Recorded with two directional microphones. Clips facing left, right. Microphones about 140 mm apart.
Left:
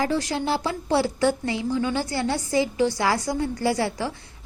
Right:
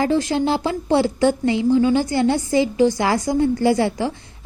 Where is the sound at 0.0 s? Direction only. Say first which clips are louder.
Right 6 dB; 25° right (ahead or behind).